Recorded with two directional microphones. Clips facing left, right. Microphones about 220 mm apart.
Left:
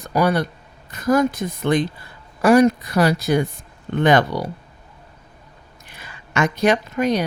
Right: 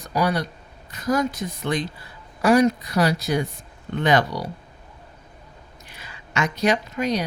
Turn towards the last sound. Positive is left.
turn(degrees=50)  # may be behind; listen again after turning